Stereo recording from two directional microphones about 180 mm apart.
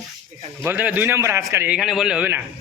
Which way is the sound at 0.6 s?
10° right (ahead or behind).